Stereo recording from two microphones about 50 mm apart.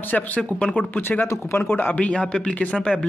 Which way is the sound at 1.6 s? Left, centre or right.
Left.